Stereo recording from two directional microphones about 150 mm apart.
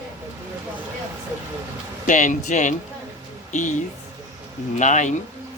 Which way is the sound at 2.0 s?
55° left (ahead or behind).